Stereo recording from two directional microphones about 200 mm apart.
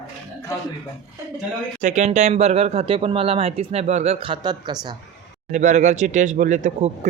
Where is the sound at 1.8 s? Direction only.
35° right (ahead or behind); by 4.9 s 20° right (ahead or behind).